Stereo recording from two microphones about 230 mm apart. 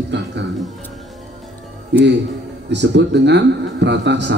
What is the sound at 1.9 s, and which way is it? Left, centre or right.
A man's voice, right.